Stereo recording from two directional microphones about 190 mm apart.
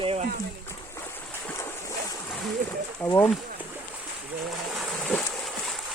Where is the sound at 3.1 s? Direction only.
15° left (ahead or behind).